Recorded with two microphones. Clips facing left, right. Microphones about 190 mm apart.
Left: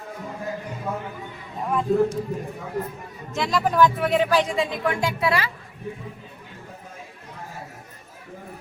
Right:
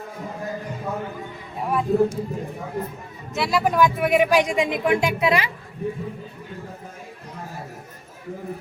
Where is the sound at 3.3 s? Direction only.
10° right (ahead or behind).